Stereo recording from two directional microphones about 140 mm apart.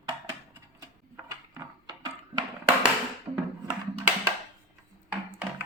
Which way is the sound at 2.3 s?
30° right (ahead or behind).